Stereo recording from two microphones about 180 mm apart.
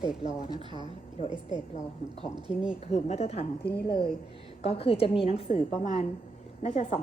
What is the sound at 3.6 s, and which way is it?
Speech, 65° left (ahead or behind).